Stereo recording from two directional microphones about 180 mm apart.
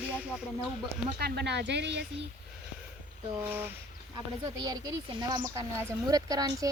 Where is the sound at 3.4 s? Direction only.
10° right (ahead or behind).